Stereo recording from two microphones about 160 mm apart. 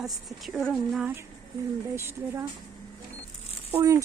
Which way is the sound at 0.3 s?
Centre (ahead or behind).